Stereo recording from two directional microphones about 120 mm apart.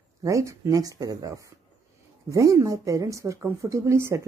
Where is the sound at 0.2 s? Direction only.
25° right (ahead or behind).